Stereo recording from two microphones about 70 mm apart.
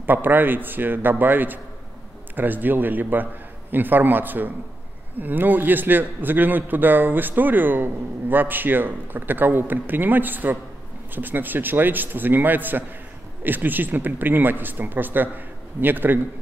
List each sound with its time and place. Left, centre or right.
0.0 s a man's voice: right